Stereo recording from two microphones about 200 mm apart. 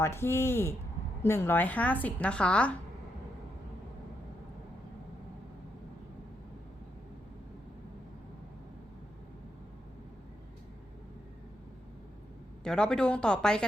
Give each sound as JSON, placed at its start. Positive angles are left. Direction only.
{"t": 0.0, "sound": "a woman's voice", "side_deg": 10}
{"t": 12.6, "sound": "speech", "side_deg": 5}